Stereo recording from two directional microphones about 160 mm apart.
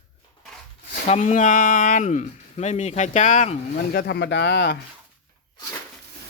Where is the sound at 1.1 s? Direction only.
50° left (ahead or behind).